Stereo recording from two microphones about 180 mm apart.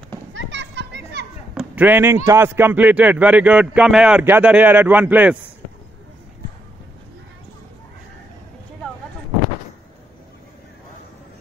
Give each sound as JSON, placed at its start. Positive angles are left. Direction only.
{"t": 0.3, "sound": "children playing", "side_deg": -90}
{"t": 1.5, "sound": "a sound", "side_deg": -5}
{"t": 2.2, "sound": "speech", "side_deg": -15}